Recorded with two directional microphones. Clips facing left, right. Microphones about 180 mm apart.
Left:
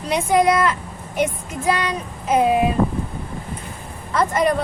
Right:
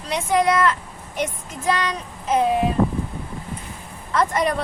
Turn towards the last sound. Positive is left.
turn(degrees=0)  # may be behind; listen again after turning